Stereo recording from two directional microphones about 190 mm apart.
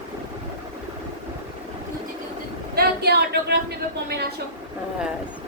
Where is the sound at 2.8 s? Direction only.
60° right (ahead or behind).